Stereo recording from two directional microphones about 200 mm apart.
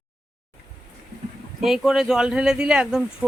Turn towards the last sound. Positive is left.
turn(degrees=-5)  # may be behind; listen again after turning